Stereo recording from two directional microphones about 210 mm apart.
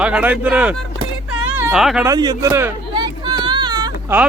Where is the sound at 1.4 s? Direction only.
10° right (ahead or behind).